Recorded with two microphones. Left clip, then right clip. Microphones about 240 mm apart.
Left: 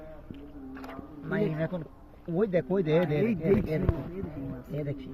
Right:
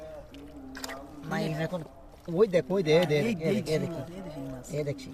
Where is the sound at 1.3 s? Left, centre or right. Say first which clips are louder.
Left 1 dB; right.